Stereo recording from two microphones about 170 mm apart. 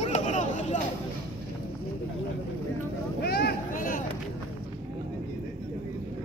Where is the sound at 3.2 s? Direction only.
70° left (ahead or behind); by 4.0 s 55° left (ahead or behind).